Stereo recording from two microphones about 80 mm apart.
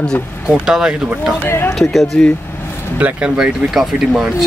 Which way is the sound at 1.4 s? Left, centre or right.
Left.